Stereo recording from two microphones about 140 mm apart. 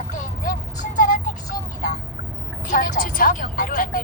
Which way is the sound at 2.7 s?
80° left.